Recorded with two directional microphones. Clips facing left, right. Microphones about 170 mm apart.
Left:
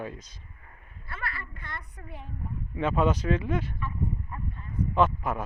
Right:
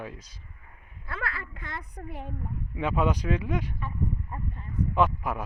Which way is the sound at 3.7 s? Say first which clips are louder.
Even; 40° right (ahead or behind).